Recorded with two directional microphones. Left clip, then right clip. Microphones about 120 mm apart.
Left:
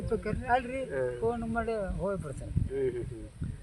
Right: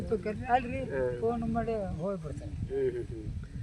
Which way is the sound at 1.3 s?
35° left (ahead or behind).